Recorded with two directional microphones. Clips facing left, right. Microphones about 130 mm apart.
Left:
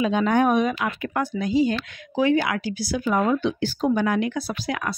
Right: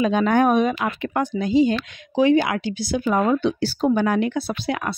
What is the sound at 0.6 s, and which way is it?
Speech, 30° right (ahead or behind).